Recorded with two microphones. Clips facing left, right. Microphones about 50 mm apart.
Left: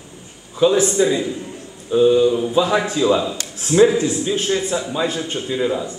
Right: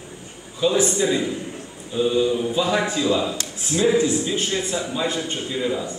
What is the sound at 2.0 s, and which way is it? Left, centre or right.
A man's voice, centre.